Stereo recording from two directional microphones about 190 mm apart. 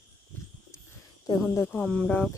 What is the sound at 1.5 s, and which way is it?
Speech, 10° left (ahead or behind).